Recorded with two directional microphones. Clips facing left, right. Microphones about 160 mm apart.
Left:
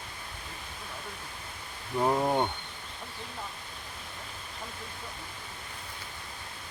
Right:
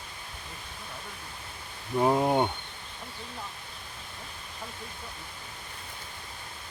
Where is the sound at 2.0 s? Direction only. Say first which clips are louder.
Right 3 dB; 15° right (ahead or behind).